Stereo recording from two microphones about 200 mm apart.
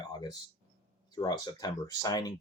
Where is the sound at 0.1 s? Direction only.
20° left (ahead or behind).